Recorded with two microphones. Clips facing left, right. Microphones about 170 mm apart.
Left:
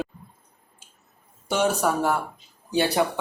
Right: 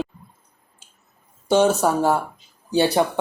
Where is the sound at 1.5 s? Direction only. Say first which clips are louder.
Right 5 dB; 25° right (ahead or behind).